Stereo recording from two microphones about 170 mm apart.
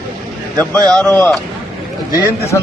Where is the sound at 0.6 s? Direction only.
5° left (ahead or behind).